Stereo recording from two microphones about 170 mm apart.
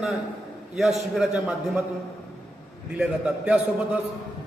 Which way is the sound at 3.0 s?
5° right (ahead or behind).